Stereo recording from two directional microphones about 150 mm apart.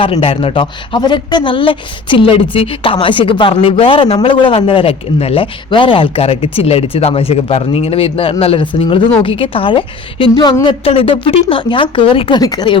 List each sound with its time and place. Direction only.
0.0 s a woman's voice: 40° left (ahead or behind)
12.4 s speech: 25° left (ahead or behind)